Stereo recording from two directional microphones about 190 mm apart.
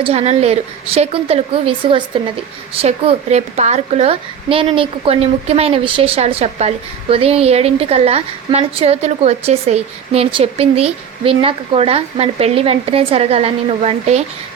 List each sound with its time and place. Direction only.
0.0 s a woman's voice: 30° right (ahead or behind)